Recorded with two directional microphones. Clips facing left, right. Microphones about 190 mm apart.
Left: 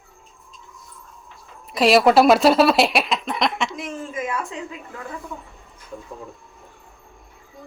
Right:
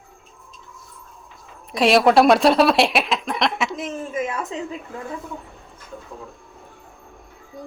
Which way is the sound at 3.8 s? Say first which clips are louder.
Right 3 dB; 25° right (ahead or behind).